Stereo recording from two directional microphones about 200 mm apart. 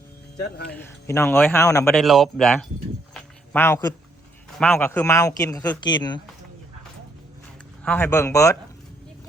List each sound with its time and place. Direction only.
0.3 s speech: 55° left (ahead or behind)
0.7 s speech: 10° left (ahead or behind)
1.9 s speech: centre (ahead or behind)
3.5 s speech: 10° left (ahead or behind)
7.9 s speech: 10° left (ahead or behind)